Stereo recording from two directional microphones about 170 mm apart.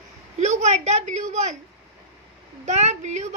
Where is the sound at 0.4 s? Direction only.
45° right (ahead or behind).